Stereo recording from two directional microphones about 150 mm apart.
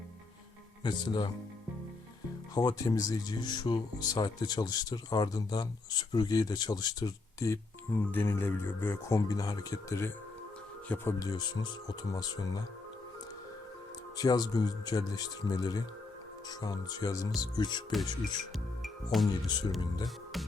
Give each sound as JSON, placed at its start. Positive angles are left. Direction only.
{"t": 0.9, "sound": "speech", "side_deg": 30}
{"t": 2.6, "sound": "speech", "side_deg": 25}
{"t": 11.3, "sound": "speech", "side_deg": 25}
{"t": 14.2, "sound": "speech", "side_deg": 25}
{"t": 18.8, "sound": "speech", "side_deg": 0}